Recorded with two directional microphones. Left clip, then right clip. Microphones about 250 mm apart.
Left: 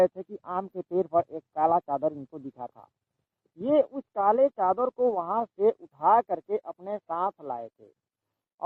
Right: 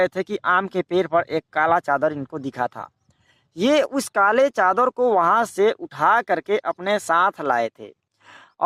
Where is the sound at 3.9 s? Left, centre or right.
Centre.